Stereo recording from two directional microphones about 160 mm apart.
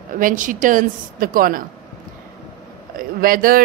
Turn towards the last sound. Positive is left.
turn(degrees=-65)  # may be behind; listen again after turning